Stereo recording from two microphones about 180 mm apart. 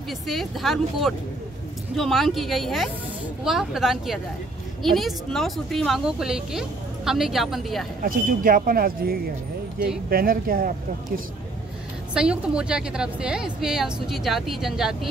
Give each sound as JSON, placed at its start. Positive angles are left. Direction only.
{"t": 0.3, "sound": "a woman's voice", "side_deg": 0}
{"t": 8.0, "sound": "speech", "side_deg": -50}
{"t": 12.1, "sound": "a woman's voice", "side_deg": -5}